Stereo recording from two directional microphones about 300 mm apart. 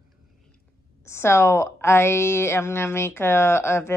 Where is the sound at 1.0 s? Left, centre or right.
Centre.